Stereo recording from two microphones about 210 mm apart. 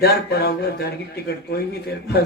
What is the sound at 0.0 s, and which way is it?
Speech, 50° left (ahead or behind).